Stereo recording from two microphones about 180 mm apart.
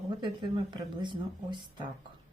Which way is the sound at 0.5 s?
25° right (ahead or behind).